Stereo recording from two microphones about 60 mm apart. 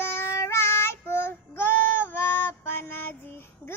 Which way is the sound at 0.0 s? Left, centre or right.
Left.